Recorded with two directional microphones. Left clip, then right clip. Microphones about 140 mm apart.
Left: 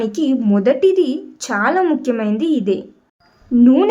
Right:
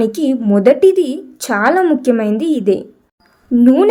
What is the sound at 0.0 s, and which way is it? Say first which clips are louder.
A woman's voice: right 3 dB; 35° right (ahead or behind).